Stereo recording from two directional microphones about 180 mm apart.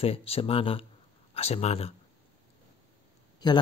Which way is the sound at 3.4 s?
25° left (ahead or behind).